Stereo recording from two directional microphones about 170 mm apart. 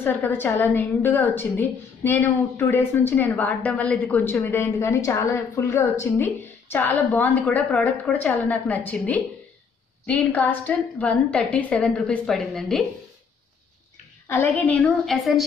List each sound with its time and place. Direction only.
0.0 s a woman's voice: 10° left (ahead or behind)
14.2 s a woman's voice: 10° left (ahead or behind)